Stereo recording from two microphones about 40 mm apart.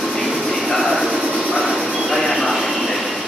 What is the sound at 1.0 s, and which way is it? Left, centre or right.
Train, centre.